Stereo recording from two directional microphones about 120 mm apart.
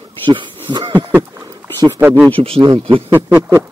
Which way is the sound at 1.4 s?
30° right (ahead or behind).